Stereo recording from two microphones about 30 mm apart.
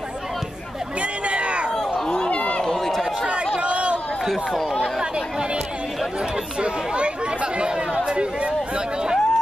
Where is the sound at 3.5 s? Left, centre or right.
Right.